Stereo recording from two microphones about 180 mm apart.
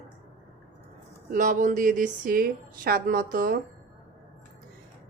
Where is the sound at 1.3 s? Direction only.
45° right (ahead or behind).